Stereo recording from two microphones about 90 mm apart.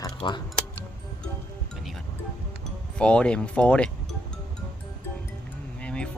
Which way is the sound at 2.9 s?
10° left (ahead or behind).